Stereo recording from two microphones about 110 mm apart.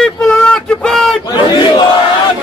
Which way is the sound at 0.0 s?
10° left (ahead or behind).